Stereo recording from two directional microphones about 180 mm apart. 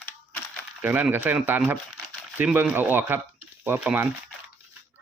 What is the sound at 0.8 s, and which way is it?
Speech, 10° right (ahead or behind).